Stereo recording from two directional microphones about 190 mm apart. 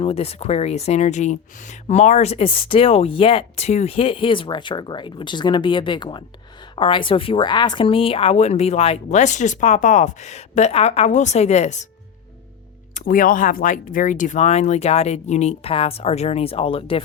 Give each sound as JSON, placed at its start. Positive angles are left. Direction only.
{"t": 0.0, "sound": "speech", "side_deg": 30}
{"t": 12.9, "sound": "speech", "side_deg": 45}